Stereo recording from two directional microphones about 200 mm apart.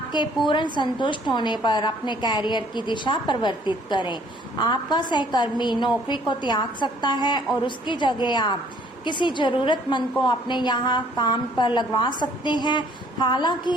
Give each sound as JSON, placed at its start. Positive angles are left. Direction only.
{"t": 0.4, "sound": "a woman's voice", "side_deg": 25}